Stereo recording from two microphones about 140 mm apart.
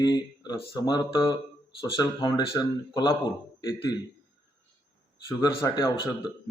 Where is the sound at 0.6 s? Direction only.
35° left (ahead or behind).